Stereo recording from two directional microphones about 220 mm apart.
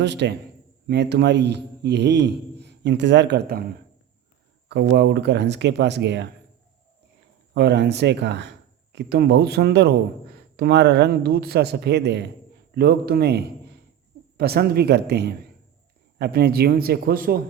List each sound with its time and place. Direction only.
0.0 s speech: 50° right (ahead or behind)
4.7 s speech: 50° right (ahead or behind)
7.5 s a man's voice: 50° right (ahead or behind)